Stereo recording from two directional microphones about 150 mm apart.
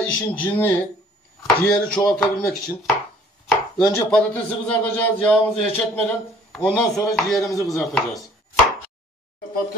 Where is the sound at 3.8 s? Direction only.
25° left (ahead or behind).